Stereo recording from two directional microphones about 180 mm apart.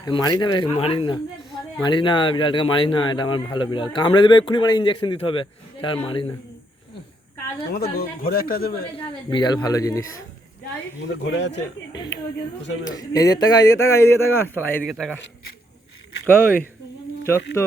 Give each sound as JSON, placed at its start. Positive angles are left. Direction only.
{"t": 0.0, "sound": "speech", "side_deg": 20}
{"t": 7.7, "sound": "speech", "side_deg": 55}
{"t": 9.0, "sound": "speech", "side_deg": 25}
{"t": 11.0, "sound": "speech", "side_deg": 80}
{"t": 13.0, "sound": "a man's voice", "side_deg": 20}
{"t": 14.8, "sound": "speech", "side_deg": -5}
{"t": 16.2, "sound": "a man's voice", "side_deg": 10}